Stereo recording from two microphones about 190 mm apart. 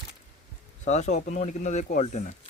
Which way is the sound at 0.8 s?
40° left (ahead or behind).